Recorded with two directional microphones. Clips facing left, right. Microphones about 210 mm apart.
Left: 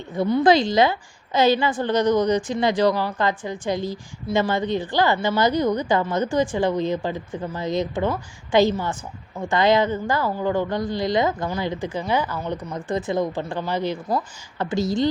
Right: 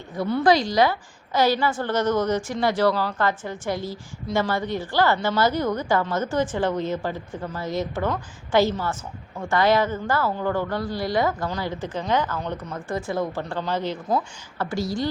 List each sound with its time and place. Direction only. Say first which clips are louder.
0.2 s a woman's voice: left 3 dB; 20° left (ahead or behind)